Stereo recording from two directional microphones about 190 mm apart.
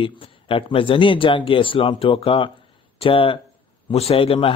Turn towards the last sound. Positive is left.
turn(degrees=30)  # may be behind; listen again after turning